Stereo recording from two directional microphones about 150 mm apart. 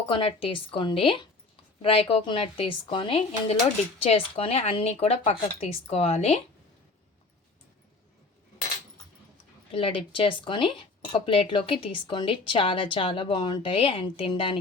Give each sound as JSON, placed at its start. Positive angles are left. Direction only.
{"t": 0.1, "sound": "speech", "side_deg": 35}
{"t": 9.7, "sound": "speech", "side_deg": 35}